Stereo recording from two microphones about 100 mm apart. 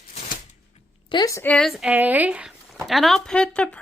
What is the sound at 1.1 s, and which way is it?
Speech, 55° left (ahead or behind).